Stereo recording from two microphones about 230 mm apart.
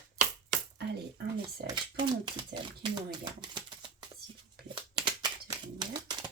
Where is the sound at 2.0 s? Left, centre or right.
Centre.